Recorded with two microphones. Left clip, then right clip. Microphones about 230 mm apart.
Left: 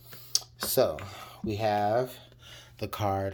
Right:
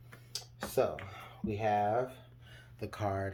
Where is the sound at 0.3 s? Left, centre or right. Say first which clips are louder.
Left 7 dB; left.